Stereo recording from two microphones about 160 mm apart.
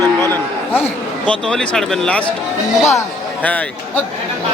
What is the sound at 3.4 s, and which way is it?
Speech, 10° left (ahead or behind).